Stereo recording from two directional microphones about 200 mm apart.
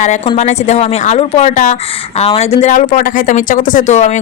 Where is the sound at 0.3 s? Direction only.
35° left (ahead or behind).